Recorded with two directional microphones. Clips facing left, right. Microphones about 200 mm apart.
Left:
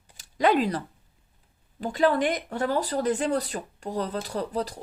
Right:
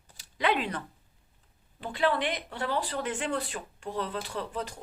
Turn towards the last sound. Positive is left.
turn(degrees=35)  # may be behind; listen again after turning